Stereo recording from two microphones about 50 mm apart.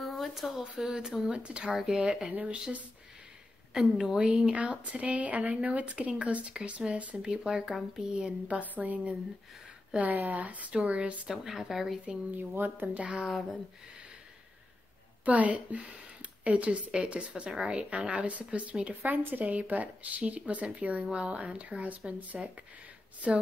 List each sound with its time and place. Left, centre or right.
0.0 s a sound: centre
0.3 s speech: centre
1.3 s speech: right
1.7 s speech: centre
2.0 s speech: centre
3.7 s speech: centre
4.3 s speech: right
10.1 s speech: right
10.7 s speech: centre
11.4 s speech: centre
12.4 s a woman's voice: right
12.8 s speech: right
15.2 s speech: right
19.1 s speech: right